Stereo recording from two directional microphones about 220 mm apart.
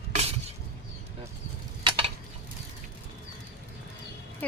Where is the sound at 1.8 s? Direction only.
25° right (ahead or behind).